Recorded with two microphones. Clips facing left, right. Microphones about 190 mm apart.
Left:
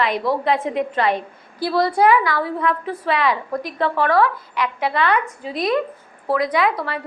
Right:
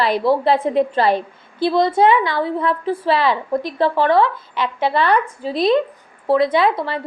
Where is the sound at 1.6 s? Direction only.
20° right (ahead or behind).